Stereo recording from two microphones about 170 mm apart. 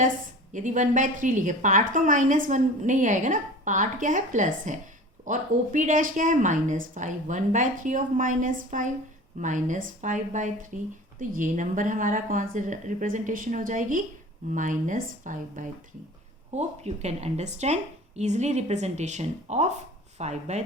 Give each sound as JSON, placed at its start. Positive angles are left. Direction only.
{"t": 0.5, "sound": "a woman's voice", "side_deg": -45}